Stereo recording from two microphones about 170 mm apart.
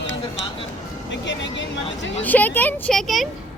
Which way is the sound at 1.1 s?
90° left.